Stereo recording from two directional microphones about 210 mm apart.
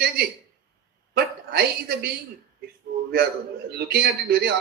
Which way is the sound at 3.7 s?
50° right (ahead or behind).